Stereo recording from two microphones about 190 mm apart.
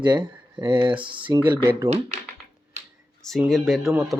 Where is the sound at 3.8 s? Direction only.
15° right (ahead or behind).